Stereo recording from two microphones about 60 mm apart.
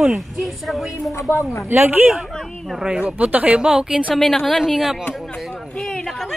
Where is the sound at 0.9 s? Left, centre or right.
Left.